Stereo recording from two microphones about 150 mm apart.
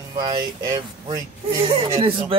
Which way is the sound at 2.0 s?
35° right (ahead or behind).